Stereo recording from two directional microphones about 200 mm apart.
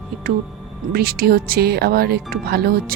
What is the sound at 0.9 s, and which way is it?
Speech, 50° right (ahead or behind).